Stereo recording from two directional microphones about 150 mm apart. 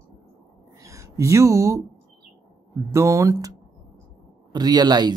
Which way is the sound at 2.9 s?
20° right (ahead or behind).